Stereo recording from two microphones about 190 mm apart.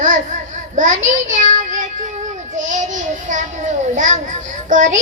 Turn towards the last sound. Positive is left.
turn(degrees=-40)  # may be behind; listen again after turning